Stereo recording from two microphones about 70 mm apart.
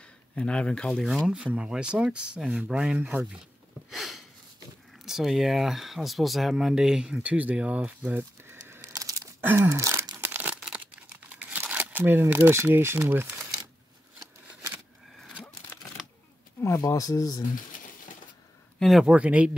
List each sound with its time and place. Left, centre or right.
0.4 s speech: centre
1.3 s speech: centre
3.9 s speech: centre; by 8.2 s right
8.2 s a sound: right
8.9 s a sound: right
9.4 s gasp: right
9.7 s a sound: right
10.1 s crumpling: right
10.6 s crumpling: centre
11.2 s crumpling: right
12.4 s speech: right
16.8 s speech: left
18.8 s speech: centre
19.0 s speech: centre